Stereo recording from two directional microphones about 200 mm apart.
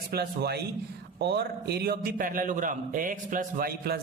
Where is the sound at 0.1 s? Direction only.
50° right (ahead or behind).